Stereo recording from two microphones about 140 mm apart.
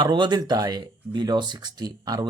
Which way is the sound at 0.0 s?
35° right (ahead or behind).